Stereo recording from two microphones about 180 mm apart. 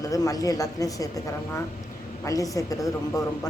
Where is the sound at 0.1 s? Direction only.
20° left (ahead or behind).